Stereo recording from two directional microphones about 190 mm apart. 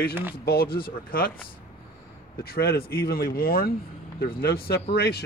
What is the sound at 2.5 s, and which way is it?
Speech, 55° left (ahead or behind).